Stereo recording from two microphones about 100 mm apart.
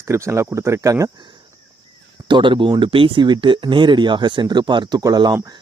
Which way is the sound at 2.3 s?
55° right (ahead or behind).